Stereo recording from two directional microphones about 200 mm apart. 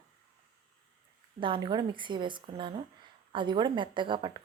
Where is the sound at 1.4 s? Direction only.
25° right (ahead or behind).